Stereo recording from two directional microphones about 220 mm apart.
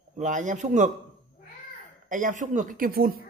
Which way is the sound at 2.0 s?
35° right (ahead or behind).